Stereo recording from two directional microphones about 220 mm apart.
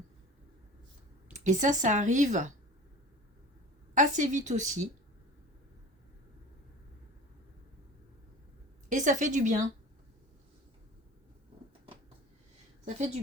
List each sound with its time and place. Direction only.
1.3 s speech: 35° right (ahead or behind)
3.9 s speech: 35° right (ahead or behind)
8.9 s speech: 35° right (ahead or behind)